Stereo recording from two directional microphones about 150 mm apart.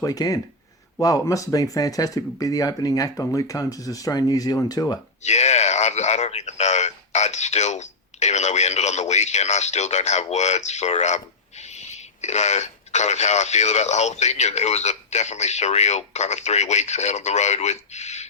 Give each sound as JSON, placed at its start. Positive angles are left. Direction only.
{"t": 0.0, "sound": "speech", "side_deg": 25}
{"t": 5.2, "sound": "speech", "side_deg": 50}